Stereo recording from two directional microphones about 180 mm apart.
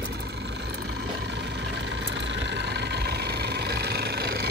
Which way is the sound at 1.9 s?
80° right.